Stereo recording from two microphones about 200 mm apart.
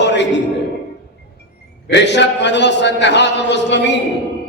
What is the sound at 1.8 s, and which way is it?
A man's voice, 60° left (ahead or behind).